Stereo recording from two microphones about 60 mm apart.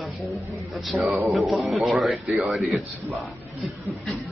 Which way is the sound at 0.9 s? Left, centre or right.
Right.